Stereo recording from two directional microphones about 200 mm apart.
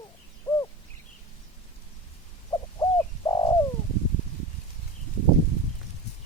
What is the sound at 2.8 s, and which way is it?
Bird, 20° left (ahead or behind).